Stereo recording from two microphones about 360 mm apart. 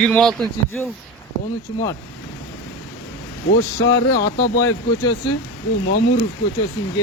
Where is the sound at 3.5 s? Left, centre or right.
Left.